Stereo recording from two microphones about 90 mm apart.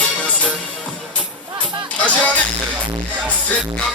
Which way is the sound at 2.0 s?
15° left (ahead or behind).